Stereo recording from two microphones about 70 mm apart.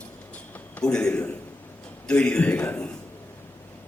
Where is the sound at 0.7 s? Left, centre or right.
Centre.